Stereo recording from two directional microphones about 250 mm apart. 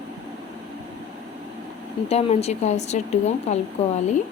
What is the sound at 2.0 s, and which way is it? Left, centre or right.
Speech, left.